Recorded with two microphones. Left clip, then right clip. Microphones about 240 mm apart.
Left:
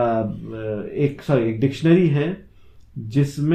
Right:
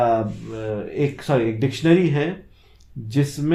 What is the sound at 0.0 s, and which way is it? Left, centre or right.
A man's voice, right.